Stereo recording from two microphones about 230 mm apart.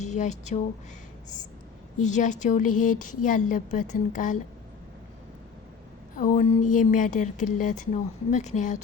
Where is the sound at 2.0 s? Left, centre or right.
Left.